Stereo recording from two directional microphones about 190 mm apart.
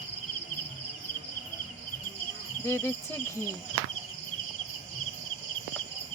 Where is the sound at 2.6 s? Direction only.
15° left (ahead or behind).